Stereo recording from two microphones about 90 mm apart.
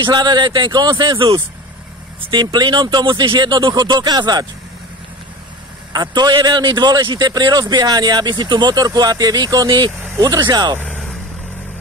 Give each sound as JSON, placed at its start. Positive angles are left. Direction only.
{"t": 0.0, "sound": "speech", "side_deg": -55}
{"t": 2.4, "sound": "speech", "side_deg": -55}
{"t": 5.9, "sound": "speech", "side_deg": -50}
{"t": 10.2, "sound": "speech", "side_deg": -45}